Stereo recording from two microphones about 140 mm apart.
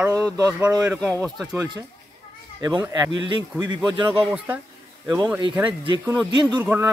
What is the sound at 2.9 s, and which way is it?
Speech, 30° right (ahead or behind).